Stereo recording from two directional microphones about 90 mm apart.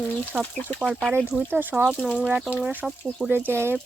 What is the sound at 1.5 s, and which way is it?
Speech, 20° right (ahead or behind).